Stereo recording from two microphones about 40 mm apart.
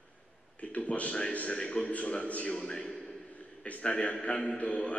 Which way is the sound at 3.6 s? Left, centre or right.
Left.